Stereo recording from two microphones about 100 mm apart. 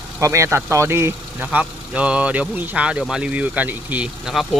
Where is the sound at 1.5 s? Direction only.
15° right (ahead or behind).